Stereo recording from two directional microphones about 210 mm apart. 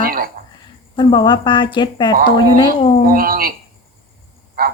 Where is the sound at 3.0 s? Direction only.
45° right (ahead or behind).